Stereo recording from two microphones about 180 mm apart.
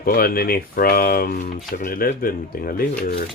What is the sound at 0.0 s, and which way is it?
Speech, 55° left (ahead or behind).